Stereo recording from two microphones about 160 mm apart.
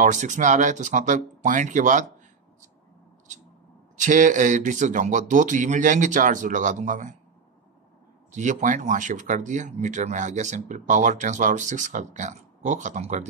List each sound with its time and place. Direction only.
0.0 s speech: 50° right (ahead or behind)
3.9 s speech: 50° right (ahead or behind)
8.4 s speech: 50° right (ahead or behind)